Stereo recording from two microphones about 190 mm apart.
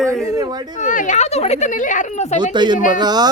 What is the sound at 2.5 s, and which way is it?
Speech, 25° right (ahead or behind).